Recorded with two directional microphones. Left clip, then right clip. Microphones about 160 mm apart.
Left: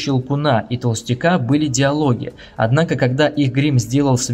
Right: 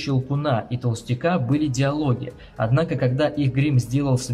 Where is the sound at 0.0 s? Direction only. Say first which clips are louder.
Left 6 dB; 30° left (ahead or behind).